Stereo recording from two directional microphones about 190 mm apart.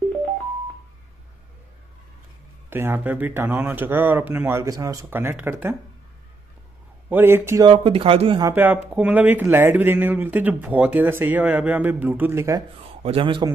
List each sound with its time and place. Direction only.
2.7 s speech: 10° right (ahead or behind)
7.1 s speech: 10° right (ahead or behind)
13.0 s speech: 30° right (ahead or behind)